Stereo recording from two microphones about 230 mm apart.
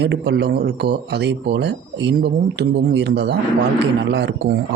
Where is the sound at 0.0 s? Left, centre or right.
Right.